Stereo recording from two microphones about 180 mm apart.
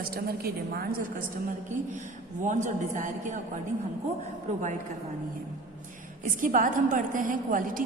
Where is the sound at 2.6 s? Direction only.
45° right (ahead or behind).